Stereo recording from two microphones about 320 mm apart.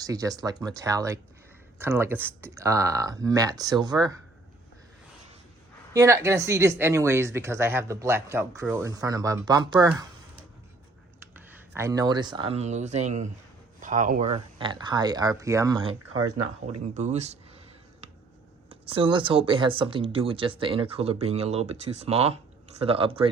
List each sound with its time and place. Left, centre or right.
0.0 s speech: centre
5.9 s speech: centre
11.3 s speech: centre
18.7 s speech: centre